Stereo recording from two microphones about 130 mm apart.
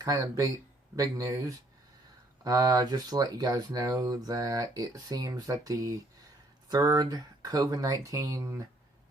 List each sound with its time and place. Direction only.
0.0 s speech: 25° right (ahead or behind)